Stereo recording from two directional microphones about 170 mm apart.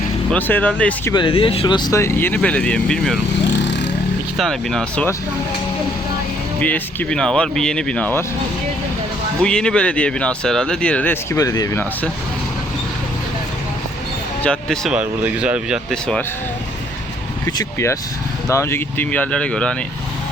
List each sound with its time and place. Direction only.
0.3 s speech: 10° left (ahead or behind)
1.1 s speech: 30° left (ahead or behind); by 3.2 s 5° left (ahead or behind)
3.6 s vehicle: 90° left
4.4 s speech: 5° left (ahead or behind)
6.6 s speech: 10° left (ahead or behind)
9.4 s speech: 5° left (ahead or behind)
14.4 s speech: 5° left (ahead or behind)
14.9 s speech: 5° right (ahead or behind)
17.4 s speech: 15° left (ahead or behind)